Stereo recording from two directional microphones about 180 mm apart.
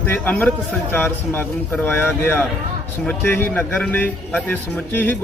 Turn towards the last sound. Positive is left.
turn(degrees=10)  # may be behind; listen again after turning